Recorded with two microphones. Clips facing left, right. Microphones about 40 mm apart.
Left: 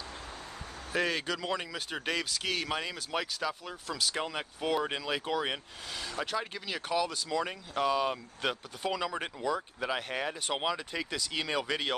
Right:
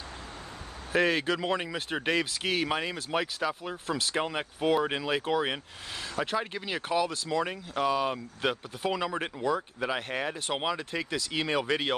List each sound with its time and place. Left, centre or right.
0.9 s speech: centre